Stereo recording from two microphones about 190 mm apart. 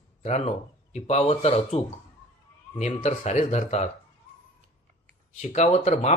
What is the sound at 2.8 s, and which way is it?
Speech, 35° left (ahead or behind).